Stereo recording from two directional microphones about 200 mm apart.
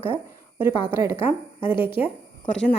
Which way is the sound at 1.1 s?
25° left (ahead or behind).